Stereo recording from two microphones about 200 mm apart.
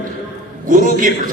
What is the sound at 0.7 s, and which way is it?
Speech, 40° right (ahead or behind).